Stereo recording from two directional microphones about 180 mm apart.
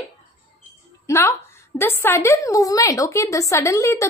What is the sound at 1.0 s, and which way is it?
Speech, 15° left (ahead or behind).